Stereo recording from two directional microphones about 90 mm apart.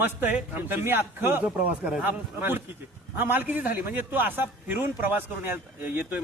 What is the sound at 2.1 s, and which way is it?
A man's voice, 25° right (ahead or behind).